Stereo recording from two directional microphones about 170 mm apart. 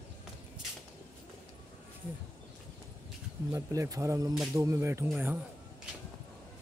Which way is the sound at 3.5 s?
20° right (ahead or behind).